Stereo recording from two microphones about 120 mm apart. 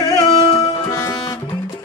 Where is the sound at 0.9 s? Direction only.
30° left (ahead or behind).